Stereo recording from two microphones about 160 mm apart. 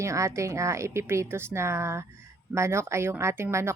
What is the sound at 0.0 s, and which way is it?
A woman's voice, 20° right (ahead or behind).